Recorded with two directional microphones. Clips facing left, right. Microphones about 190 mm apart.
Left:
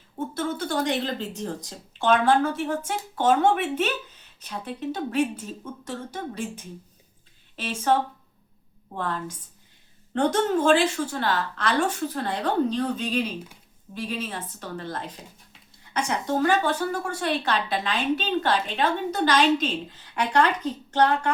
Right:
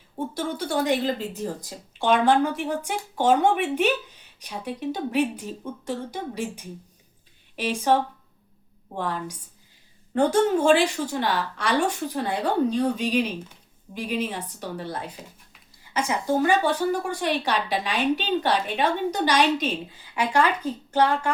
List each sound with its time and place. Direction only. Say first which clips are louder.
0.3 s speech: even; 10° right (ahead or behind)
9.0 s speech: right 1 dB; 10° right (ahead or behind)